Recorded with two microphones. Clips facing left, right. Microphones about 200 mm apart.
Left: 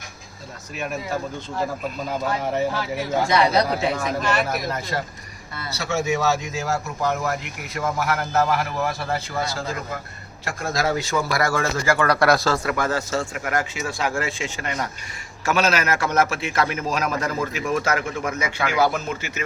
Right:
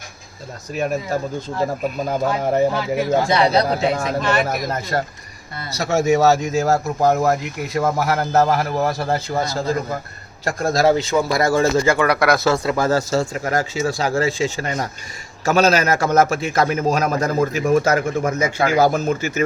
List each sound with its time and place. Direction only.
0.8 s a man's voice: 40° right (ahead or behind)
3.1 s speech: 30° right (ahead or behind)
4.4 s a man's voice: 45° right (ahead or behind); by 12.2 s 15° right (ahead or behind)
12.4 s a man's voice: 25° right (ahead or behind); by 19.4 s 45° right (ahead or behind)